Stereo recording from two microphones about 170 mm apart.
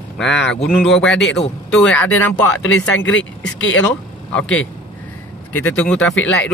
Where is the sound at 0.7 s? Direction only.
Centre (ahead or behind).